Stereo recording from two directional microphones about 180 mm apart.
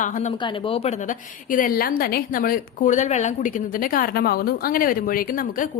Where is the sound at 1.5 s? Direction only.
50° left (ahead or behind).